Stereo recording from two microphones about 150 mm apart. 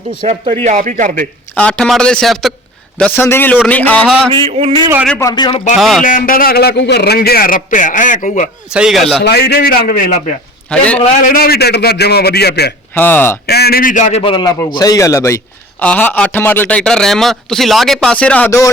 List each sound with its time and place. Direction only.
0.6 s speech: 50° right (ahead or behind)
1.5 s a man's voice: 10° left (ahead or behind)
3.0 s speech: 15° left (ahead or behind)
4.3 s speech: 40° right (ahead or behind)
5.2 s speech: 30° left (ahead or behind)
5.7 s a man's voice: centre (ahead or behind)
6.0 s a man's voice: 60° left (ahead or behind)
8.7 s a man's voice: 5° right (ahead or behind)
9.3 s a man's voice: 90° left; by 10.3 s 60° left (ahead or behind)
10.7 s speech: 10° left (ahead or behind)
11.3 s a man's voice: 85° left
12.9 s speech: 10° left (ahead or behind)
13.5 s a man's voice: 90° left; by 14.2 s 55° left (ahead or behind)
14.3 s a man's voice: 35° left (ahead or behind); by 18.7 s 15° left (ahead or behind)